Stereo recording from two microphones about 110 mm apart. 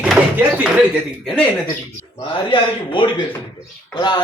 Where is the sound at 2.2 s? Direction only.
50° left (ahead or behind).